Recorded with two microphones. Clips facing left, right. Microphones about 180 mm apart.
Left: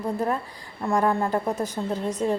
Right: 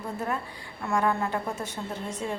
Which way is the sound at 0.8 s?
35° left (ahead or behind).